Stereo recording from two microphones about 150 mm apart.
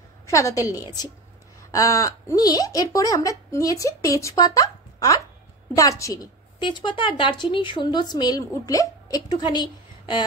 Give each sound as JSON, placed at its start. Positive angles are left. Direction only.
{"t": 0.3, "sound": "a woman's voice", "side_deg": 20}
{"t": 6.6, "sound": "speech", "side_deg": 30}